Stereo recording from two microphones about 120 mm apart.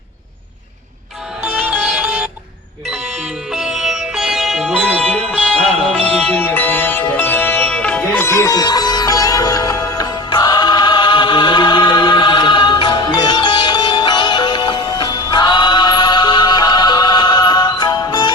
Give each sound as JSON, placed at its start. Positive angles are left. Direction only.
{"t": 1.5, "sound": "music", "side_deg": -15}
{"t": 3.5, "sound": "music", "side_deg": -5}
{"t": 5.0, "sound": "music", "side_deg": 10}
{"t": 8.2, "sound": "music", "side_deg": 20}